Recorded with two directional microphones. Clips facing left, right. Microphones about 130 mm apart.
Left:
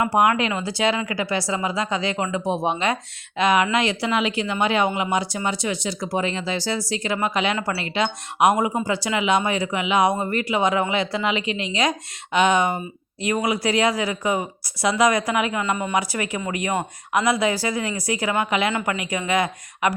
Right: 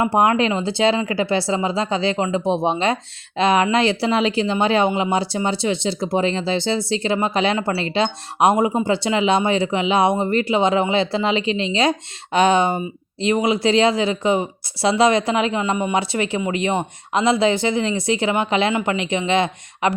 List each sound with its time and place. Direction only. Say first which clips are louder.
0.0 s speech: right 2 dB; 30° right (ahead or behind)